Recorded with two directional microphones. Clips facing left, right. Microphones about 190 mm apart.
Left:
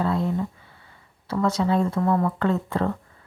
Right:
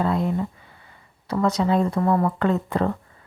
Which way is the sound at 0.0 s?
15° right (ahead or behind).